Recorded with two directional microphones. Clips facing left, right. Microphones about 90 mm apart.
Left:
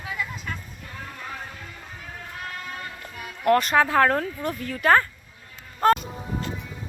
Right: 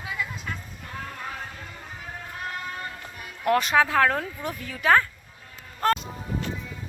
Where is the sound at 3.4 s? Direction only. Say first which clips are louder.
Left 2 dB; centre (ahead or behind).